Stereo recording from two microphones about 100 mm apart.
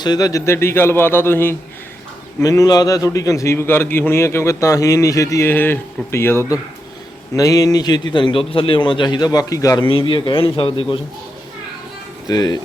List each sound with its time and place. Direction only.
0.0 s a man's voice: 40° left (ahead or behind); by 1.5 s 20° left (ahead or behind)
2.4 s a man's voice: 35° left (ahead or behind)
5.5 s a man's voice: 20° left (ahead or behind)
7.3 s a man's voice: 35° left (ahead or behind)
8.1 s a man's voice: 55° left (ahead or behind); by 9.8 s 35° left (ahead or behind)
9.8 s speech: 60° left (ahead or behind)
12.3 s a man's voice: 45° left (ahead or behind)